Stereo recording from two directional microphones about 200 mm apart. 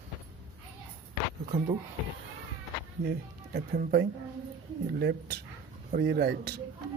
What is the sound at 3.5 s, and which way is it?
Speech, 50° right (ahead or behind).